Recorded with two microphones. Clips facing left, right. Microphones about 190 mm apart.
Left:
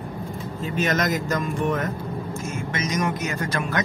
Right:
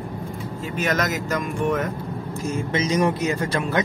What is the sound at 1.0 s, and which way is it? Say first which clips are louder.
Speech: even; 5° right (ahead or behind).